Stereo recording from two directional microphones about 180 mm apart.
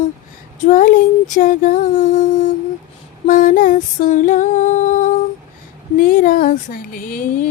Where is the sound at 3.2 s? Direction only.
50° left (ahead or behind).